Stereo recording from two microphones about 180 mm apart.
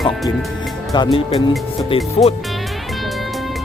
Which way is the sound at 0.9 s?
25° left (ahead or behind).